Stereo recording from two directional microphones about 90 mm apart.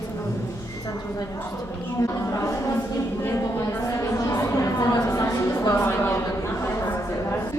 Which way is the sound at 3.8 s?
35° left (ahead or behind).